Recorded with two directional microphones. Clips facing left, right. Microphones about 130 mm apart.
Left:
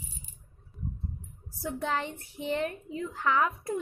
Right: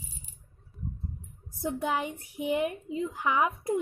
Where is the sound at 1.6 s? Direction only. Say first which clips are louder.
Right 2 dB; 15° right (ahead or behind).